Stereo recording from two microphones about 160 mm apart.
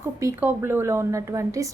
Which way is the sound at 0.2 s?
15° right (ahead or behind).